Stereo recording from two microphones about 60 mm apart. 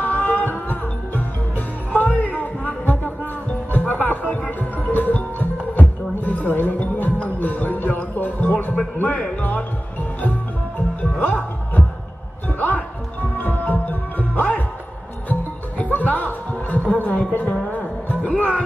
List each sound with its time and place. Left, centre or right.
0.0 s music: left
11.0 s music: left
15.8 s music: left